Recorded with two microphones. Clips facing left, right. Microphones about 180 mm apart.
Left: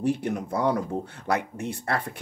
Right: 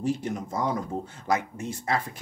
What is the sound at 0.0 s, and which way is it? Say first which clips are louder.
Speech: left 2 dB; 60° left (ahead or behind).